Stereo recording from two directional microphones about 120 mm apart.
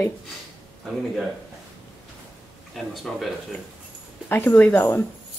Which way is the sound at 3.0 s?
Centre (ahead or behind).